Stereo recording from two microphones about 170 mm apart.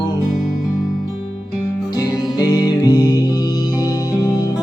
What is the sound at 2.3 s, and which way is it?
Music, 20° left (ahead or behind).